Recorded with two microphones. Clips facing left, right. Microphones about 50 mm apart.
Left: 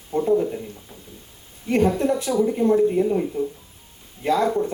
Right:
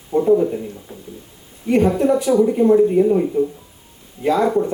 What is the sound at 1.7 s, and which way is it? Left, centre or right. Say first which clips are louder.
A woman's voice: right 4 dB; right.